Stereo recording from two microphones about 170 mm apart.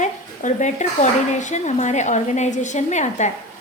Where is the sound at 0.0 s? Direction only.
45° left (ahead or behind).